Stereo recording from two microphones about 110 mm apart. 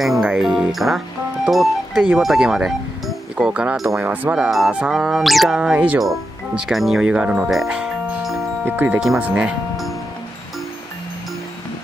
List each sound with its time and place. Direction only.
0.0 s speech: 5° right (ahead or behind)
4.0 s speech: 15° right (ahead or behind)
8.6 s speech: 15° right (ahead or behind)